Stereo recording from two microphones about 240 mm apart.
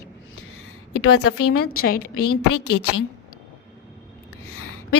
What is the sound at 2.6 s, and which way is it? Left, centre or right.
Speech, left.